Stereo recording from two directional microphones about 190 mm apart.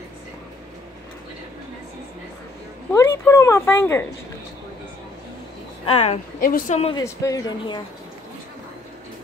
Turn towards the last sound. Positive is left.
turn(degrees=20)  # may be behind; listen again after turning